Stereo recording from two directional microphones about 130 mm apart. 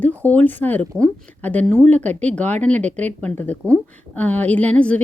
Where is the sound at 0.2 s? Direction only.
15° left (ahead or behind).